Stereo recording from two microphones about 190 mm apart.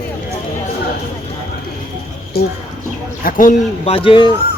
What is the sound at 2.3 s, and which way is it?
Speech, 55° left (ahead or behind).